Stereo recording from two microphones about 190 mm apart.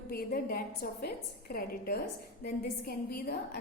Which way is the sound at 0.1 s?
50° left (ahead or behind).